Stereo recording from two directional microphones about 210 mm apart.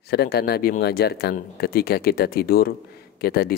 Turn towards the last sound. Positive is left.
turn(degrees=45)  # may be behind; listen again after turning